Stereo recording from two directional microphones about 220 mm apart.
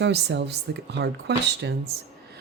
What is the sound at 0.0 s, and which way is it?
Speech, 50° right (ahead or behind).